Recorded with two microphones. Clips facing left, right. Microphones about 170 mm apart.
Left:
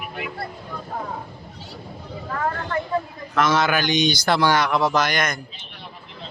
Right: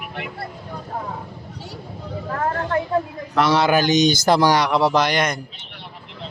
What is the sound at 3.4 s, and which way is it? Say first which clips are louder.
Speech: right 3 dB; 30° right (ahead or behind).